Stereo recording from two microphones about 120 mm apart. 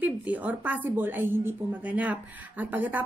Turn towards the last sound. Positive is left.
turn(degrees=-15)  # may be behind; listen again after turning